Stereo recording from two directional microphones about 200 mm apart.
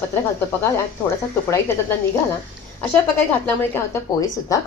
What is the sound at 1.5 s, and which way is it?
Speech, 15° left (ahead or behind).